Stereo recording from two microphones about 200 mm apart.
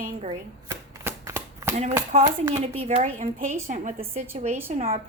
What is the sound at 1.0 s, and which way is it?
Shuffling cards, 10° right (ahead or behind).